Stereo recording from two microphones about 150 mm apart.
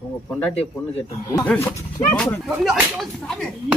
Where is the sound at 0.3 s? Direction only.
5° left (ahead or behind).